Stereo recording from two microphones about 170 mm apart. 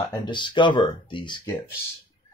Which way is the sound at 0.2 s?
25° left (ahead or behind).